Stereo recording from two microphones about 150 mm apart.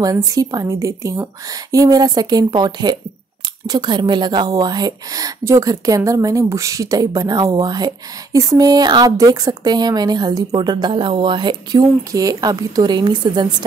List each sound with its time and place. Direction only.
0.0 s a woman's voice: 25° right (ahead or behind)